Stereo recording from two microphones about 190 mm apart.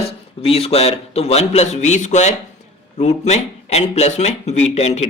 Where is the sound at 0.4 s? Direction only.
30° left (ahead or behind).